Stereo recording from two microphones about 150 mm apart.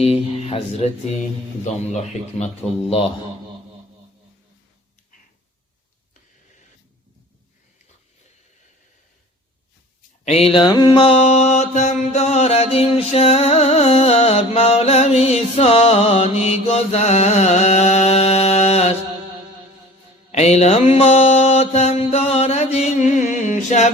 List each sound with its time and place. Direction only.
0.0 s speech: 45° left (ahead or behind)
2.4 s speech: 40° left (ahead or behind)
10.2 s mantra: 40° left (ahead or behind)
20.3 s mantra: 45° left (ahead or behind)